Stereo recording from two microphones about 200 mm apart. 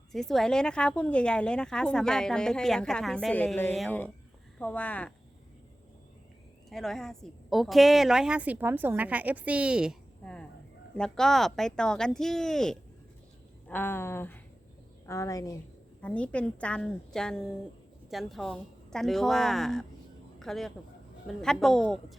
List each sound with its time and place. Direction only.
0.1 s a woman's voice: centre (ahead or behind)
6.7 s a woman's voice: centre (ahead or behind); by 15.5 s 15° left (ahead or behind)
16.0 s a woman's voice: 5° left (ahead or behind)